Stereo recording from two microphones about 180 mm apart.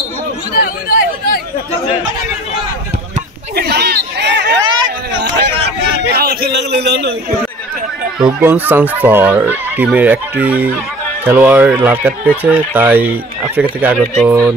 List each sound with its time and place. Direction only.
0.6 s chatter: 55° left (ahead or behind)
3.5 s chatter: 60° right (ahead or behind)
6.0 s a man's voice: 60° right (ahead or behind)
8.2 s speech: 10° right (ahead or behind)